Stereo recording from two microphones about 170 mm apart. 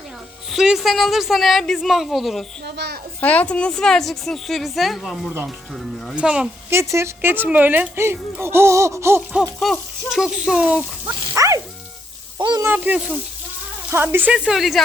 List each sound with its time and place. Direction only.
0.5 s a woman's voice: 5° right (ahead or behind)
2.6 s a child's voice: 75° right (ahead or behind)
3.2 s a woman's voice: 10° left (ahead or behind); by 9.4 s 15° right (ahead or behind)
9.4 s a woman's voice: centre (ahead or behind)
11.3 s bow-wow: 20° right (ahead or behind)
12.4 s speech: 25° right (ahead or behind)
12.6 s speech: 10° right (ahead or behind)